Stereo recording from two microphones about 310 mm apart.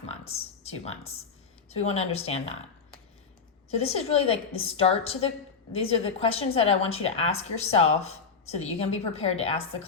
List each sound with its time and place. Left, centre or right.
0.0 s a sound: centre
1.7 s a woman's voice: centre
3.8 s a woman's voice: centre